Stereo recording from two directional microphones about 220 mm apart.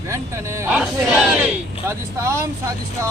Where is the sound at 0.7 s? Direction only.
5° right (ahead or behind).